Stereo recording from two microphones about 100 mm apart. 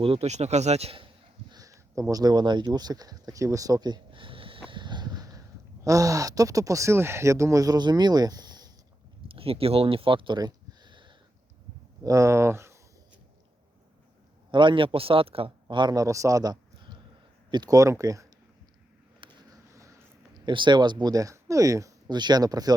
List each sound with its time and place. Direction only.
0.0 s speech: 80° right
1.5 s speech: 35° right (ahead or behind); by 4.6 s 65° right (ahead or behind)
4.7 s a sound: 50° right (ahead or behind)
5.8 s speech: 35° right (ahead or behind)
9.2 s a sound: 70° right (ahead or behind); by 11.1 s 50° right (ahead or behind)
12.0 s speech: 30° right (ahead or behind)
14.5 s speech: 55° right (ahead or behind)
15.7 s speech: 50° right (ahead or behind)
16.0 s speech: 30° right (ahead or behind)
19.2 s a sound: 55° right (ahead or behind)
19.7 s a sound: 30° right (ahead or behind)
20.3 s speech: 50° right (ahead or behind); by 22.1 s 35° right (ahead or behind)
22.1 s speech: 45° right (ahead or behind)